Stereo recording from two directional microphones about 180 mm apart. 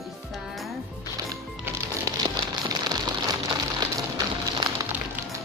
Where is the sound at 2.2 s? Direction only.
20° right (ahead or behind).